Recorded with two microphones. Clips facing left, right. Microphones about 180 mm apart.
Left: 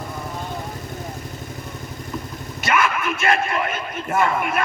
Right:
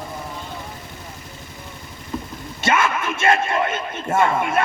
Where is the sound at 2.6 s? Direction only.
25° right (ahead or behind).